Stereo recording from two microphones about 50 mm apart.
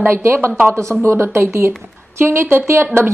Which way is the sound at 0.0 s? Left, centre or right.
Right.